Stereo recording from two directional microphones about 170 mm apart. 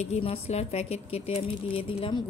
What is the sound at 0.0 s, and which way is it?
Speech, 35° left (ahead or behind).